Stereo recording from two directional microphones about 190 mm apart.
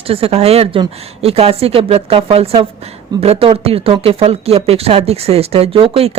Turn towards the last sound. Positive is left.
turn(degrees=-30)  # may be behind; listen again after turning